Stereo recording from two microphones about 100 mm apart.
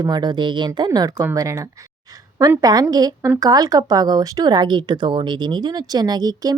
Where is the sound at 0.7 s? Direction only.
40° right (ahead or behind).